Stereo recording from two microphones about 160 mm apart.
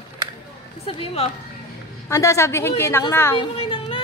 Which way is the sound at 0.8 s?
35° left (ahead or behind).